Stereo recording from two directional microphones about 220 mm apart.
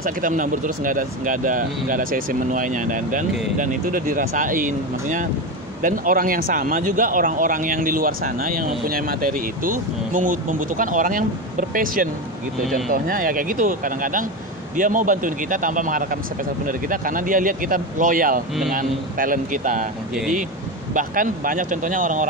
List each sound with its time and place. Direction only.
0.0 s a man's voice: 35° right (ahead or behind)
20.9 s a man's voice: 40° right (ahead or behind)